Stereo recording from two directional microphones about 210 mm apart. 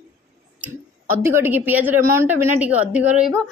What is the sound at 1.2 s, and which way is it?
A woman's voice, 10° right (ahead or behind).